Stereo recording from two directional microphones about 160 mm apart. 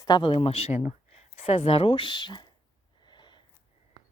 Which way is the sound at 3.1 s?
30° left (ahead or behind).